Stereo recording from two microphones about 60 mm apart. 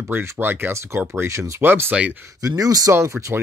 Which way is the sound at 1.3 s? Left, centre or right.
Right.